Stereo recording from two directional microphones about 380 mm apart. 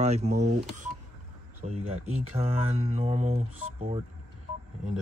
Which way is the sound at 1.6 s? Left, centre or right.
Centre.